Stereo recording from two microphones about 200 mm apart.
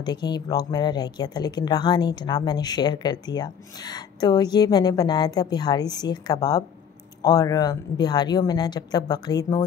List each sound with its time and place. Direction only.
0.0 s speech: 20° left (ahead or behind)